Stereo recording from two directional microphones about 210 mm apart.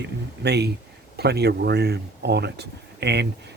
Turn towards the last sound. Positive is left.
turn(degrees=-55)  # may be behind; listen again after turning